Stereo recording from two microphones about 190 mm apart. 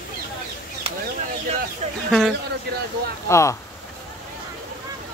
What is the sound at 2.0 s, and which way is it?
Speech, centre (ahead or behind).